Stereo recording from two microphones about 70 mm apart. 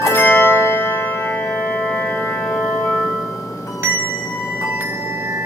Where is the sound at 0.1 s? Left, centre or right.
Left.